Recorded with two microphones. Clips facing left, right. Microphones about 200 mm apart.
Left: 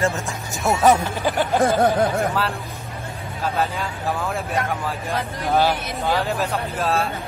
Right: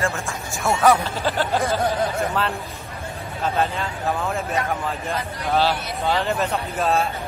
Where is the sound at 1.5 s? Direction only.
50° left (ahead or behind).